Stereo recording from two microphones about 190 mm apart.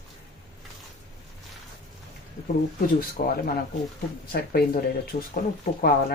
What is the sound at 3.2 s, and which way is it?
Speech, 45° left (ahead or behind).